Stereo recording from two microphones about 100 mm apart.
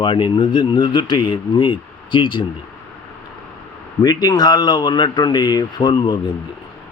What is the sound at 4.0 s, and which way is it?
A man's voice, 40° left (ahead or behind).